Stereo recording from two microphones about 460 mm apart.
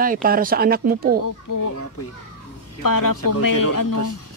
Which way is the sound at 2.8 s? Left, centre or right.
Left.